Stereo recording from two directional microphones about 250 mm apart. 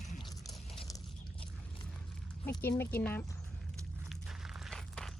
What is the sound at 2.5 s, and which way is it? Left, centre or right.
Speech, centre.